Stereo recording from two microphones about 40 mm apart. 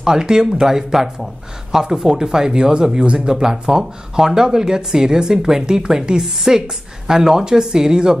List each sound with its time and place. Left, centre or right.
0.0 s speech: centre